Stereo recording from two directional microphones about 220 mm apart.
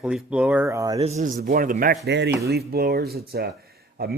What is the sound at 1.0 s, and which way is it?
Speech, 30° right (ahead or behind).